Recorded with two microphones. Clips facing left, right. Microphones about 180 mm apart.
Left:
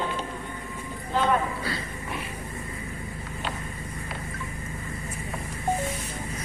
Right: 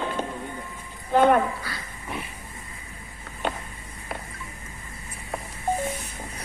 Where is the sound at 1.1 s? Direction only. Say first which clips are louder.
Right 6 dB; 55° right (ahead or behind).